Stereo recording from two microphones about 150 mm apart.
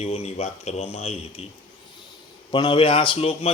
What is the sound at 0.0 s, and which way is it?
Speech, 45° left (ahead or behind).